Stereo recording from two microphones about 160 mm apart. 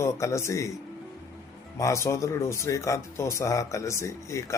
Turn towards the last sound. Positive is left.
turn(degrees=20)  # may be behind; listen again after turning